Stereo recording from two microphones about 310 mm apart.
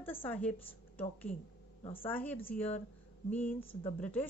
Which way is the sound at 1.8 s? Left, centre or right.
Centre.